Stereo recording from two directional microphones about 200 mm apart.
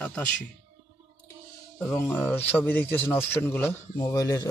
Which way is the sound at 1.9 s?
10° left (ahead or behind).